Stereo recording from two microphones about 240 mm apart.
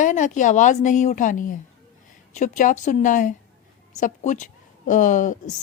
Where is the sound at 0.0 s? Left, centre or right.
Left.